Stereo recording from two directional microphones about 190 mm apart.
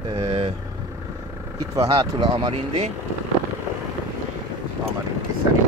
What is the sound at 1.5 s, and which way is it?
Speech, 20° right (ahead or behind).